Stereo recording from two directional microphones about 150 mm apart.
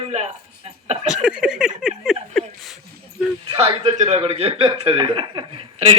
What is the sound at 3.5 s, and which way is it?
A man's voice, 45° right (ahead or behind).